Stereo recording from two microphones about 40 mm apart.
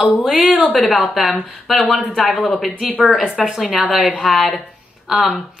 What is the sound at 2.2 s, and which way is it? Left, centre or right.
Speech, left.